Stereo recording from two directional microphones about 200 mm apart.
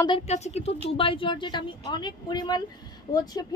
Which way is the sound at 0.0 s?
30° left (ahead or behind).